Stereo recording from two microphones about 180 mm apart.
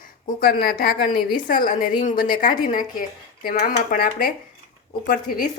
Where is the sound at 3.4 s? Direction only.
55° left (ahead or behind).